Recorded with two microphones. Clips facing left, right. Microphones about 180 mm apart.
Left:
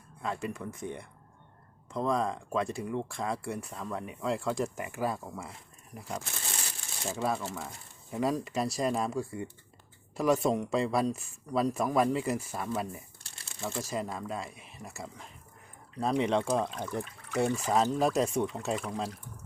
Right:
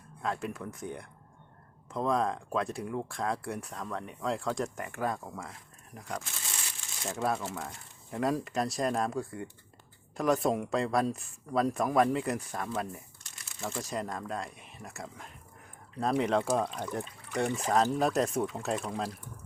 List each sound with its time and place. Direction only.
0.2 s speech: centre (ahead or behind)
13.2 s a sound: 30° left (ahead or behind)
13.6 s speech: centre (ahead or behind)